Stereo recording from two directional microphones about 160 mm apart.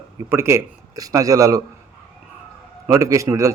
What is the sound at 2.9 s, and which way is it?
Speech, 20° right (ahead or behind).